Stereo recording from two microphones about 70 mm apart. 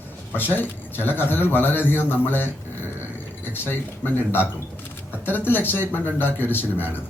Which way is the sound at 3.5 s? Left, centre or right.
Left.